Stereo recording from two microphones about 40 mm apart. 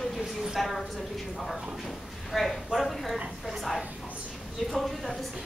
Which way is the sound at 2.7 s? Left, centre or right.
Centre.